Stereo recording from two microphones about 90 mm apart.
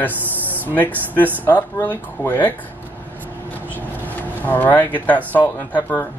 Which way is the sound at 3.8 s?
20° left (ahead or behind).